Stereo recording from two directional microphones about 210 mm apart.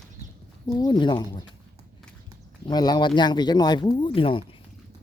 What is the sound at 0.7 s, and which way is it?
Speech, 20° left (ahead or behind).